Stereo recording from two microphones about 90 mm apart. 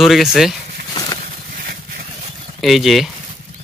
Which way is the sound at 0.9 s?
45° left (ahead or behind).